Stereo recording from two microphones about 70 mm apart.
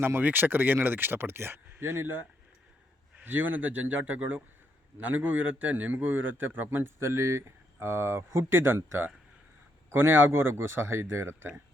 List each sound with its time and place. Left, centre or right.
0.0 s a man's voice: right